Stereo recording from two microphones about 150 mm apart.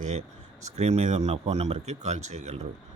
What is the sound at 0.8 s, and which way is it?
Speech, 45° right (ahead or behind).